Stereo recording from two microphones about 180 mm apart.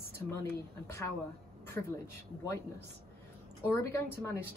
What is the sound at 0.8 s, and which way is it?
Speech, 15° left (ahead or behind).